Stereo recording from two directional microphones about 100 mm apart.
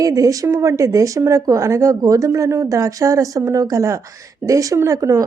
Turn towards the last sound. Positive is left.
turn(degrees=-35)  # may be behind; listen again after turning